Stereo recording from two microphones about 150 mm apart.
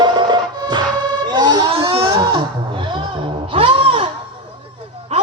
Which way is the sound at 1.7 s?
40° right (ahead or behind).